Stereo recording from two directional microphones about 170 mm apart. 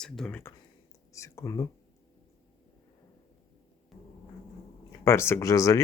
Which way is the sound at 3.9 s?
Centre (ahead or behind).